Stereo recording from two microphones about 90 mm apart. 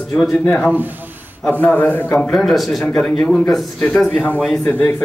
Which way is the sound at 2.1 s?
5° left (ahead or behind).